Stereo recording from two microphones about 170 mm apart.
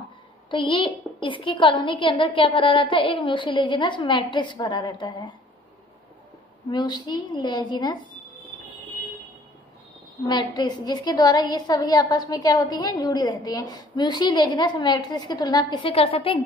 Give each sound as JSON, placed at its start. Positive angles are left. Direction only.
{"t": 0.5, "sound": "a woman's voice", "side_deg": 30}
{"t": 6.7, "sound": "a woman's voice", "side_deg": 25}
{"t": 10.2, "sound": "a woman's voice", "side_deg": 25}